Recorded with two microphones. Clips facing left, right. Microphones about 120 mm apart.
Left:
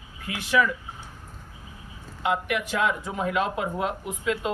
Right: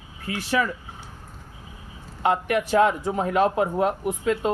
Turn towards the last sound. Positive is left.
turn(degrees=-40)  # may be behind; listen again after turning